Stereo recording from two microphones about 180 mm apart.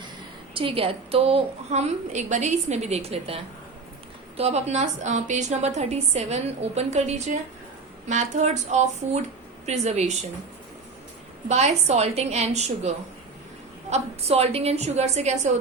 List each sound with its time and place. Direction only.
0.5 s a woman's voice: 30° right (ahead or behind)
11.4 s a woman's voice: 40° right (ahead or behind)
13.9 s a woman's voice: 35° right (ahead or behind)